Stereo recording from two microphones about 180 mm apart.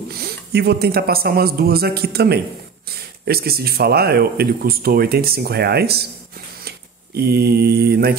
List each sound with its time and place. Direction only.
0.1 s speech: 60° right (ahead or behind)
7.2 s speech: 65° right (ahead or behind)